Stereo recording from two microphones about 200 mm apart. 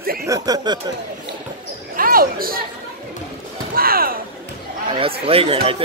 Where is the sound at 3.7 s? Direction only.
50° right (ahead or behind).